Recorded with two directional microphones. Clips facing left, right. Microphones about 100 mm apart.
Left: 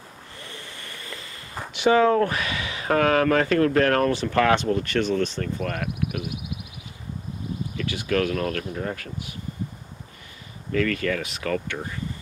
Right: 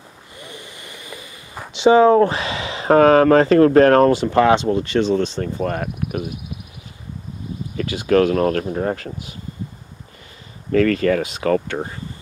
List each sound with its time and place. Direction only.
0.4 s a sound: 15° right (ahead or behind)
1.7 s speech: 20° right (ahead or behind)
8.1 s speech: 40° right (ahead or behind)
10.7 s speech: 40° right (ahead or behind)